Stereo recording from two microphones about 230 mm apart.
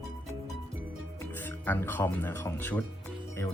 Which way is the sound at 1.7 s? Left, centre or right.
Centre.